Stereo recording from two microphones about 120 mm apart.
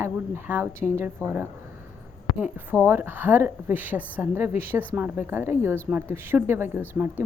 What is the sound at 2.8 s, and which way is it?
A woman's voice, 20° right (ahead or behind).